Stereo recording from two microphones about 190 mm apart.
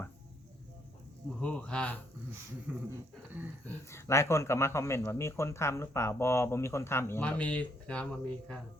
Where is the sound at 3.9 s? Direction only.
15° left (ahead or behind).